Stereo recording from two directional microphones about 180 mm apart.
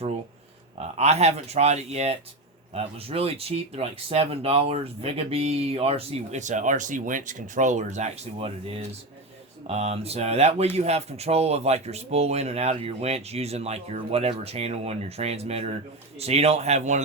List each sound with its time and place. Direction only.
0.9 s speech: 35° right (ahead or behind)